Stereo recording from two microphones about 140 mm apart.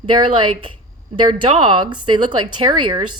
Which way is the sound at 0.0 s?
35° right (ahead or behind).